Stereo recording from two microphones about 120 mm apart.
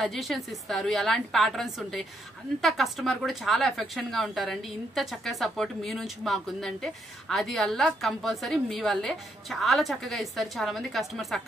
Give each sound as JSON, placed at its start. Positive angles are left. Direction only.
{"t": 0.0, "sound": "speech", "side_deg": 0}